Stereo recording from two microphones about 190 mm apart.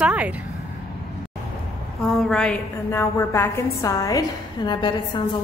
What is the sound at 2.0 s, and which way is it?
A woman's voice, centre (ahead or behind).